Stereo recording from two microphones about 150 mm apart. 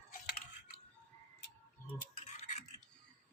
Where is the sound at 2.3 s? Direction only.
50° left (ahead or behind).